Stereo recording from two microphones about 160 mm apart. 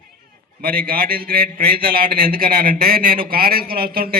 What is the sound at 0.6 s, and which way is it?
A man's voice, 65° right (ahead or behind).